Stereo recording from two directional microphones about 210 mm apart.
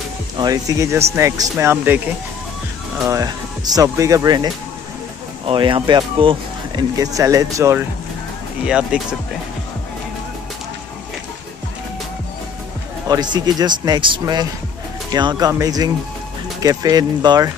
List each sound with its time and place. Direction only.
0.4 s speech: 15° right (ahead or behind)
3.1 s speech: 15° right (ahead or behind)
5.5 s speech: 25° right (ahead or behind)
8.6 s speech: 5° right (ahead or behind)
13.1 s speech: 20° right (ahead or behind)